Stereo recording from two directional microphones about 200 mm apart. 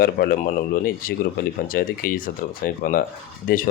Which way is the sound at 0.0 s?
50° left (ahead or behind).